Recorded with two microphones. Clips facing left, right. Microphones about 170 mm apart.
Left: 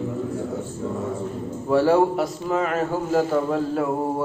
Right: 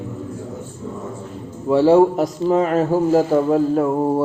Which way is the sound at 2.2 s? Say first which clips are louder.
Right 6 dB; 35° right (ahead or behind).